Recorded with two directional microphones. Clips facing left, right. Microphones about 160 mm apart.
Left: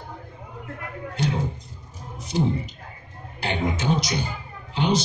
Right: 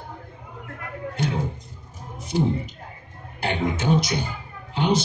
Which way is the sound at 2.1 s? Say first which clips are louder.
Right 1 dB; 50° right (ahead or behind).